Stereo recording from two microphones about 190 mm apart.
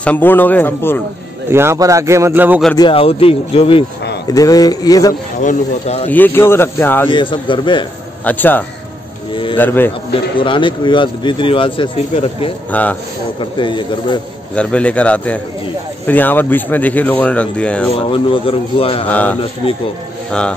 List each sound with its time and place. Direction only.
0.0 s speech: 10° left (ahead or behind)
1.5 s speech: 15° right (ahead or behind)
2.8 s a man's voice: 30° left (ahead or behind)
4.3 s a man's voice: 20° left (ahead or behind)
5.4 s speech: 40° left (ahead or behind)
6.0 s speech: 10° left (ahead or behind)
7.1 s a man's voice: 25° left (ahead or behind)
8.3 s speech: 10° left (ahead or behind)
9.3 s a man's voice: 25° left (ahead or behind)
9.6 s speech: 10° left (ahead or behind)
10.3 s a man's voice: 25° left (ahead or behind)
14.5 s speech: 5° left (ahead or behind)
17.9 s a man's voice: 30° left (ahead or behind)
19.0 s a man's voice: 10° left (ahead or behind)